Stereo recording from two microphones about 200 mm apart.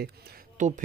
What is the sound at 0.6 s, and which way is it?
Speech, 40° right (ahead or behind).